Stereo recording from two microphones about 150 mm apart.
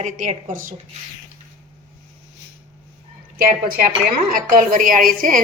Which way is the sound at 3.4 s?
85° right.